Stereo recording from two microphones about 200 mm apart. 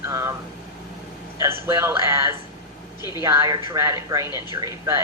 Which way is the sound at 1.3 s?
15° right (ahead or behind).